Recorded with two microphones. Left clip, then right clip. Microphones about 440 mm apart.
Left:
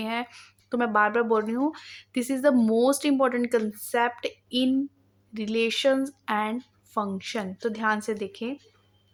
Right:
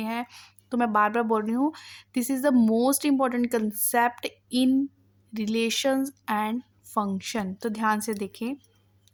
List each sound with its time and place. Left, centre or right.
0.0 s speech: right